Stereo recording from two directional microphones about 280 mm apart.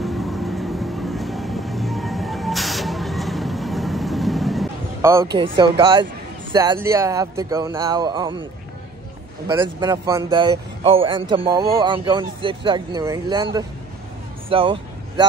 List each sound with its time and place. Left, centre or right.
0.0 s vehicle: centre
6.5 s a man's voice: centre
9.5 s a man's voice: centre
14.5 s a sound: centre